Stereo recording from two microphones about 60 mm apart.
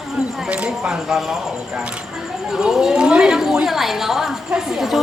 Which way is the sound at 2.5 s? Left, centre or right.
Centre.